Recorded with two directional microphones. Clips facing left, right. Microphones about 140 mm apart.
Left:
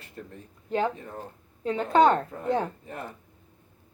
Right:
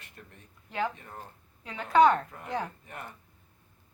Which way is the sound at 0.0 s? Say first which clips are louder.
Left 9 dB; 30° left (ahead or behind).